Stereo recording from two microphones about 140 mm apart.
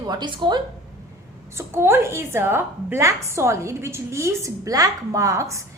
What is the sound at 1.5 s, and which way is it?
A woman's voice, 15° right (ahead or behind).